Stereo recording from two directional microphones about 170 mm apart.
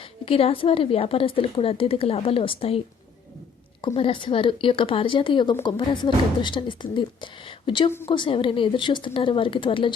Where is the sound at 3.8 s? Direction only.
30° left (ahead or behind).